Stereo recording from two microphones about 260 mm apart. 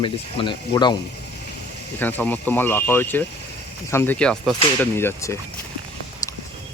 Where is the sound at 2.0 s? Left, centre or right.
Centre.